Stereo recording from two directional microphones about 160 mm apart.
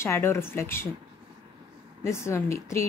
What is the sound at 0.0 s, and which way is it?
Speech, 15° left (ahead or behind).